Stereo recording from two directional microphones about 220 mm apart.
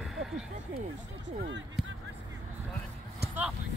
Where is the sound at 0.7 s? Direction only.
50° right (ahead or behind).